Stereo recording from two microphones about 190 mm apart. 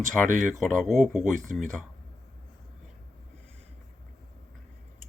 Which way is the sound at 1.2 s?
40° right (ahead or behind).